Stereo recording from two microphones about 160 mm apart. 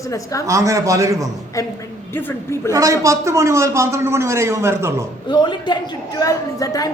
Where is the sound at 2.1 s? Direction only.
15° left (ahead or behind).